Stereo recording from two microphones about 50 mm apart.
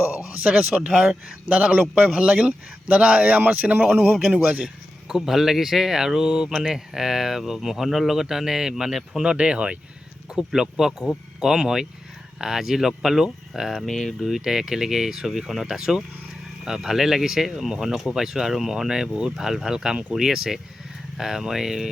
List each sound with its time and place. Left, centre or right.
0.4 s a man's voice: right
0.8 s speech: centre
1.5 s a man's voice: right
4.1 s a man's voice: centre
4.6 s a sound: centre
5.2 s speech: centre
9.2 s a man's voice: right
10.3 s speech: centre